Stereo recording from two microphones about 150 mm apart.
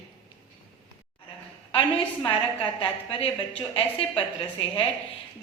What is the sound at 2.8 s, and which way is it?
Speech, 40° left (ahead or behind).